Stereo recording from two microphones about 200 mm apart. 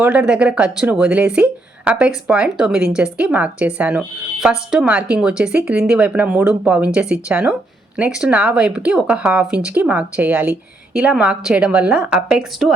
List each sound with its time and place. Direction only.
0.0 s speech: 5° right (ahead or behind)